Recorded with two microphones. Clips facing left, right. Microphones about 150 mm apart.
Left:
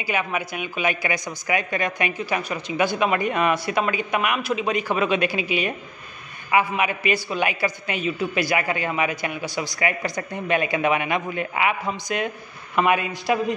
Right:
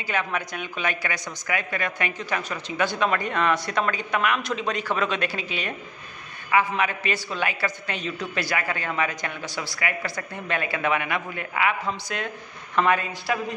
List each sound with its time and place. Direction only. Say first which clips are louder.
0.0 s a woman's voice: left 2 dB; 10° left (ahead or behind)